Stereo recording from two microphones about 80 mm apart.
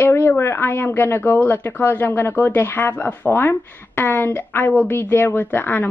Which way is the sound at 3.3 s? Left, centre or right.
Left.